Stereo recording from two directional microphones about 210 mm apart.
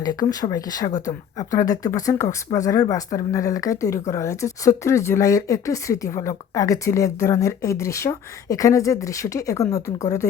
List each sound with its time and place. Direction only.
0.0 s speech: 20° left (ahead or behind)